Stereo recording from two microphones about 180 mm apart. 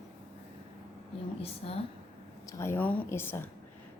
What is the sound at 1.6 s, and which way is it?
Speech, 35° left (ahead or behind).